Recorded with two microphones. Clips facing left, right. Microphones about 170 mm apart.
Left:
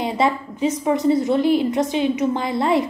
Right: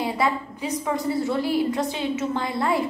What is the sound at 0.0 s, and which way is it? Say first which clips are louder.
A woman's voice: left 4 dB; 20° left (ahead or behind).